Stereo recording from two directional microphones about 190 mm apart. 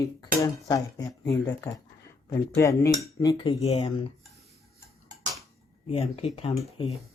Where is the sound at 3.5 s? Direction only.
35° left (ahead or behind).